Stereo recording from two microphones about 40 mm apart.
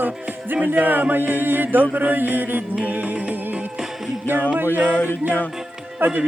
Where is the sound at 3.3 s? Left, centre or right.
Right.